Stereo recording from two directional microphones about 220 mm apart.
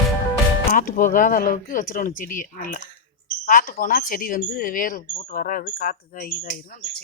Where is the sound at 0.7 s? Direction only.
40° left (ahead or behind).